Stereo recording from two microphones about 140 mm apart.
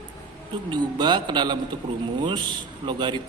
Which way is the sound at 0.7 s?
30° right (ahead or behind).